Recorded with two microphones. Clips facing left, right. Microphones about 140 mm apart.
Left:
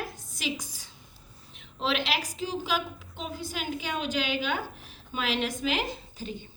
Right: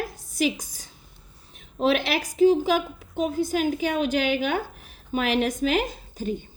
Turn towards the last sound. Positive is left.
turn(degrees=-45)  # may be behind; listen again after turning